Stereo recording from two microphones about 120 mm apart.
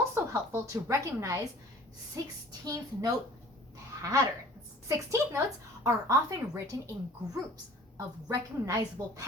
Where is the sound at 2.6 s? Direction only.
30° right (ahead or behind).